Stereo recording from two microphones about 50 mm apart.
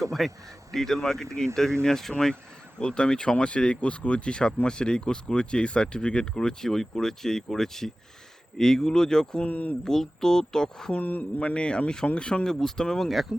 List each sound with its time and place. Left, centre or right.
0.2 s speech: centre
9.4 s speech: left
9.8 s speech: centre
11.0 s speech: left
11.3 s speech: left